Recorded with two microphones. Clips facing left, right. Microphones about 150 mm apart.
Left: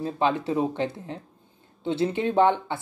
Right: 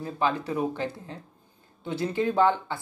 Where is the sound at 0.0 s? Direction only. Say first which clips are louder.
Left 3 dB; 25° left (ahead or behind).